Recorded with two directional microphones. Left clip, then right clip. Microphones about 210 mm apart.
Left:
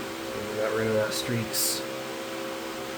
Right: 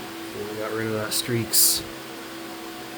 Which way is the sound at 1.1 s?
50° right (ahead or behind).